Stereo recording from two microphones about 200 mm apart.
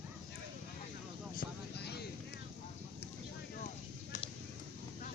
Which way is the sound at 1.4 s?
55° left (ahead or behind).